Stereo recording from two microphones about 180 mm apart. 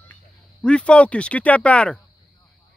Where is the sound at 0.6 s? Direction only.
5° left (ahead or behind).